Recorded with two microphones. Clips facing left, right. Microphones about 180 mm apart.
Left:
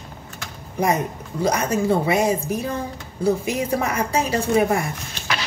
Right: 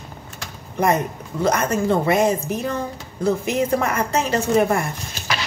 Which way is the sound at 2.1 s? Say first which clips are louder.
Right 1 dB; 10° left (ahead or behind).